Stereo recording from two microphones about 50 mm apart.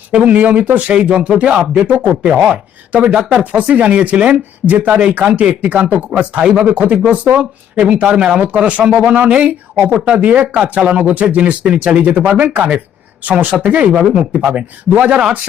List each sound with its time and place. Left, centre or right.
0.1 s speech: right
3.4 s speech: right
10.5 s speech: right